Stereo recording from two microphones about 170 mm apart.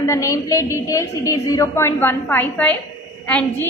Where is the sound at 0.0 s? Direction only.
15° left (ahead or behind).